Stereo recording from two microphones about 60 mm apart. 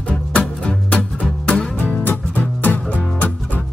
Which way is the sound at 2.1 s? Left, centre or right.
Left.